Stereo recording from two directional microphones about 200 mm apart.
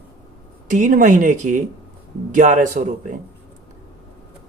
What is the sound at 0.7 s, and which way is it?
Speech, 40° right (ahead or behind).